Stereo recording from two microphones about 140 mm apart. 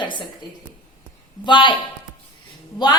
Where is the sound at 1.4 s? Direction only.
35° left (ahead or behind).